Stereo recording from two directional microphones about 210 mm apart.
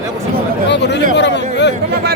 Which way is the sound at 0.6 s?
55° left (ahead or behind).